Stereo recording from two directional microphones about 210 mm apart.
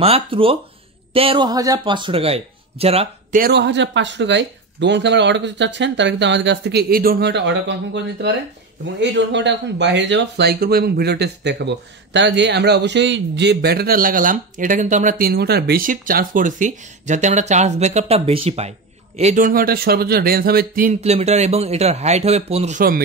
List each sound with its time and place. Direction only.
0.0 s speech: 25° right (ahead or behind)
3.3 s speech: 50° right (ahead or behind)